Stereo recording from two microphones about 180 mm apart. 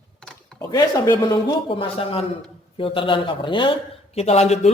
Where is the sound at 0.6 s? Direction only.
20° left (ahead or behind).